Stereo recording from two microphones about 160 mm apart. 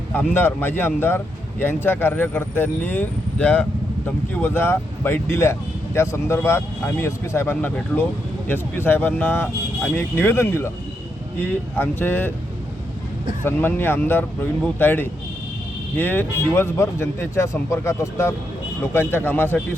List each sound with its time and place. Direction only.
0.1 s speech: 10° left (ahead or behind)
13.4 s speech: 10° left (ahead or behind)